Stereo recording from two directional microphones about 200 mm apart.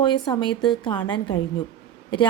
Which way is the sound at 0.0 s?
20° left (ahead or behind).